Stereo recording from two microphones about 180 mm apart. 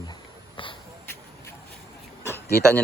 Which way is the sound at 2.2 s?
10° left (ahead or behind).